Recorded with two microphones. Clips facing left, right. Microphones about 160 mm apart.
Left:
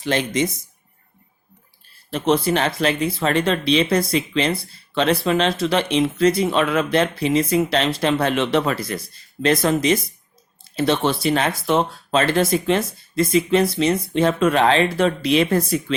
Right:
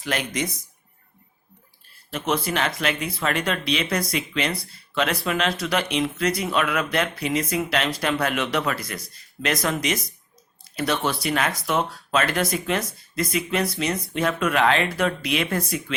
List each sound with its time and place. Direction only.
0.0 s speech: 25° left (ahead or behind)
2.0 s speech: 30° left (ahead or behind)